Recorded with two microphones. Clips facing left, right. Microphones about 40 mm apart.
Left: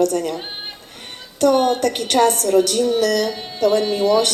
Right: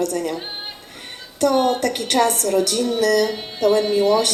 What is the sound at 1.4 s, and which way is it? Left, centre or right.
A woman's voice, left.